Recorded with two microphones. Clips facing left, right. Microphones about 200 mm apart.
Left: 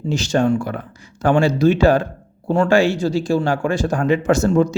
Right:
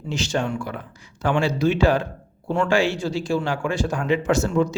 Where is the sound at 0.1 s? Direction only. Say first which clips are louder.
Left 7 dB; 40° left (ahead or behind).